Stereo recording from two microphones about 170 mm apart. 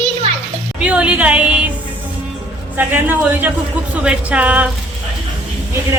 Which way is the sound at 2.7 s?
10° right (ahead or behind).